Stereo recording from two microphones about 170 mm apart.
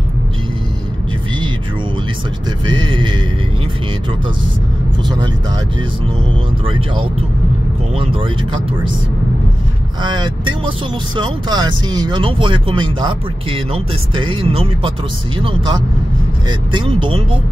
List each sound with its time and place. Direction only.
2.6 s speech: 25° right (ahead or behind)
8.0 s speech: 30° right (ahead or behind)
10.0 s speech: 25° right (ahead or behind)